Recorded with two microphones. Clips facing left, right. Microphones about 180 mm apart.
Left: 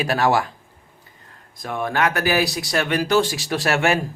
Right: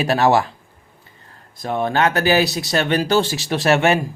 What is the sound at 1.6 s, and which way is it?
Speech, 25° right (ahead or behind).